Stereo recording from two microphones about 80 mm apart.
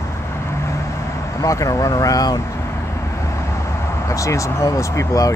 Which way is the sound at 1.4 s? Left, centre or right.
Left.